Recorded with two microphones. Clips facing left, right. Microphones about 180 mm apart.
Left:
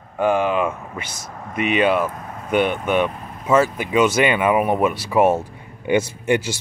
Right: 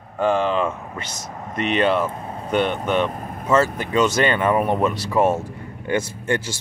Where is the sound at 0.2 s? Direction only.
10° left (ahead or behind).